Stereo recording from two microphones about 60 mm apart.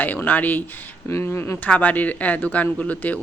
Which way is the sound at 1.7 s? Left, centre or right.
Left.